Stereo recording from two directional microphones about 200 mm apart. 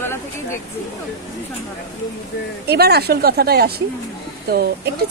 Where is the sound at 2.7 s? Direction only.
55° right (ahead or behind).